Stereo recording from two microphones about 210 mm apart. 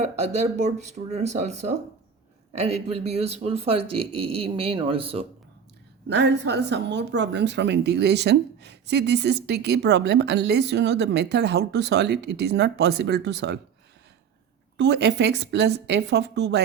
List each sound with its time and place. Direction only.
0.2 s speech: 30° right (ahead or behind)
6.1 s a woman's voice: 55° right (ahead or behind)
14.8 s a woman's voice: 55° right (ahead or behind)